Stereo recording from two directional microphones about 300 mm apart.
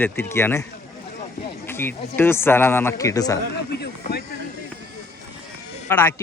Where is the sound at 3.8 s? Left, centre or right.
Left.